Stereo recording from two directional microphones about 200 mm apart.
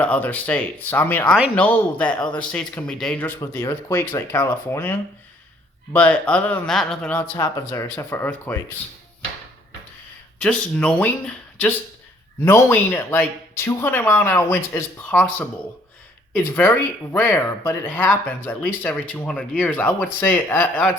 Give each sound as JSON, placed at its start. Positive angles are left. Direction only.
{"t": 0.0, "sound": "speech", "side_deg": 5}
{"t": 7.2, "sound": "speech", "side_deg": 15}
{"t": 10.3, "sound": "speech", "side_deg": 5}